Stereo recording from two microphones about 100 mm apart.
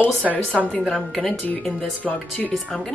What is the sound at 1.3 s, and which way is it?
Speech, 15° left (ahead or behind).